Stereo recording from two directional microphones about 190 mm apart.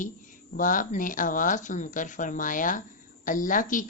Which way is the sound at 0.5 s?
45° left (ahead or behind).